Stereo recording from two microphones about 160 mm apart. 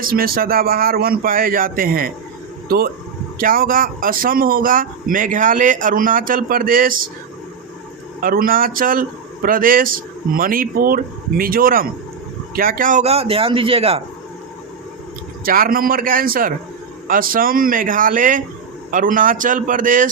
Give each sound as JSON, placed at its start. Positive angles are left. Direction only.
{"t": 0.0, "sound": "speech", "side_deg": -65}
{"t": 3.3, "sound": "speech", "side_deg": -65}
{"t": 8.2, "sound": "a man's voice", "side_deg": -65}
{"t": 15.4, "sound": "speech", "side_deg": -65}